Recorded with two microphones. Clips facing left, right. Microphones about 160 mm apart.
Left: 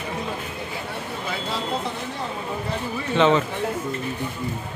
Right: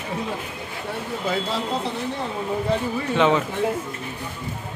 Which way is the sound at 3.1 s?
10° right (ahead or behind).